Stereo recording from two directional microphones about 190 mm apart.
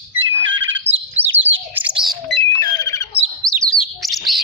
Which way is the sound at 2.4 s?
15° left (ahead or behind).